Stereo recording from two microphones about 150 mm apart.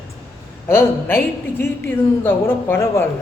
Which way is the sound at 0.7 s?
15° left (ahead or behind).